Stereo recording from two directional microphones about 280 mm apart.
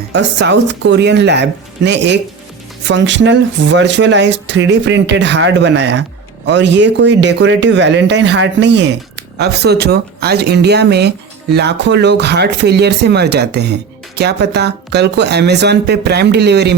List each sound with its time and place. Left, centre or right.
0.1 s speech: right